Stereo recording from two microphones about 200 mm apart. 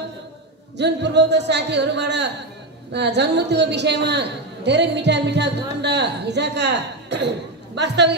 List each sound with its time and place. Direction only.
0.7 s a woman's voice: 60° right (ahead or behind)